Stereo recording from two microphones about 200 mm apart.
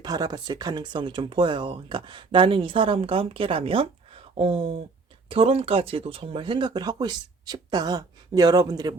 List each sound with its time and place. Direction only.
0.0 s speech: 20° right (ahead or behind)